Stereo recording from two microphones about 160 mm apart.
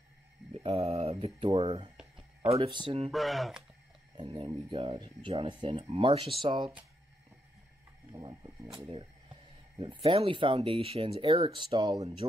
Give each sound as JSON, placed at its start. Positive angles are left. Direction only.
{"t": 0.5, "sound": "a sound", "side_deg": -40}
{"t": 1.2, "sound": "speech", "side_deg": -40}
{"t": 3.1, "sound": "speech", "side_deg": 0}
{"t": 4.2, "sound": "speech", "side_deg": -30}
{"t": 8.1, "sound": "speech", "side_deg": -25}
{"t": 8.7, "sound": "speech", "side_deg": -35}
{"t": 12.0, "sound": "speech", "side_deg": -40}